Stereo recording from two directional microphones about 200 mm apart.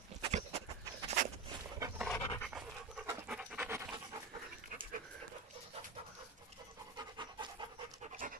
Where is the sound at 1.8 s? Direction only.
15° right (ahead or behind).